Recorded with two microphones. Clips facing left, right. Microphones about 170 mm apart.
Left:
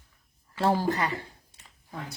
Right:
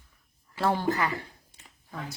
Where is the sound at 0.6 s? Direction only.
35° left (ahead or behind).